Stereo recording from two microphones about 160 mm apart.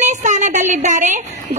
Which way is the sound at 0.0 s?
50° right (ahead or behind).